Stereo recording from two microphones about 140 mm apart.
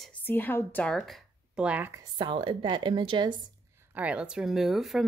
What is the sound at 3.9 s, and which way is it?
A woman's voice, 10° right (ahead or behind).